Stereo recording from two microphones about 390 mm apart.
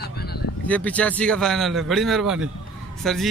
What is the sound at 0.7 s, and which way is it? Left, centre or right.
Speech, centre.